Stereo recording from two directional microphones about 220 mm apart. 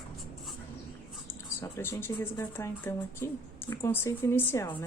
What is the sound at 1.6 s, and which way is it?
Speech, 10° left (ahead or behind).